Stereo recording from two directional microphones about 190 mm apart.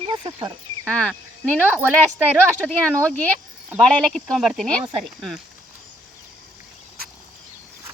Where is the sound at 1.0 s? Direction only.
5° left (ahead or behind).